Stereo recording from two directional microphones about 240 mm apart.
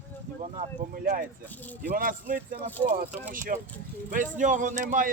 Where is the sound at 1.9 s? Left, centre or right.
Right.